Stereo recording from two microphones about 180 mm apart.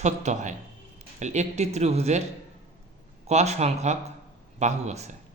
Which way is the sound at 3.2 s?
35° right (ahead or behind).